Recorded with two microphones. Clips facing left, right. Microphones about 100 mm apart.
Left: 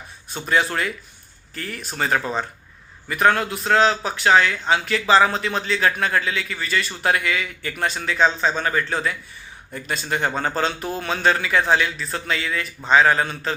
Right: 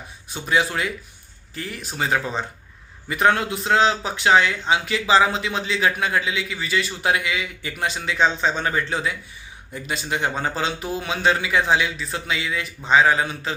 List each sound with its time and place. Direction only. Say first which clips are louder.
0.3 s a man's voice: left 1 dB; 10° right (ahead or behind)